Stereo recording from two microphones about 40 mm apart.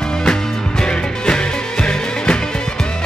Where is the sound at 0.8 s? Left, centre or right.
Left.